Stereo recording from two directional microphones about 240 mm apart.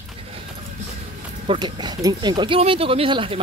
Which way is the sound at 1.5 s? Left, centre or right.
Centre.